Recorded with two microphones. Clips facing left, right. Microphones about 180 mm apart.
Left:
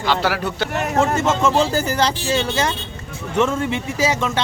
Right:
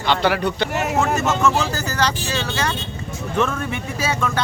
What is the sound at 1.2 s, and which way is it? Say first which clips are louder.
A man's voice: left 2 dB; 25° left (ahead or behind).